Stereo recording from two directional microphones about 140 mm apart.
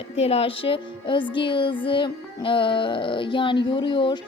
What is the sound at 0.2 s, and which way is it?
Speech, 45° left (ahead or behind).